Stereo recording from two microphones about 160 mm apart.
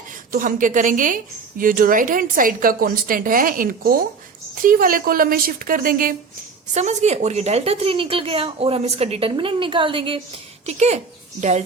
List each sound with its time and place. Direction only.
0.3 s a woman's voice: 60° right (ahead or behind)
6.7 s a woman's voice: 45° right (ahead or behind)
10.7 s speech: 45° right (ahead or behind)